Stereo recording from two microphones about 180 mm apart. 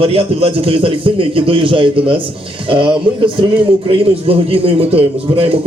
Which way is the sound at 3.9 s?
30° right (ahead or behind).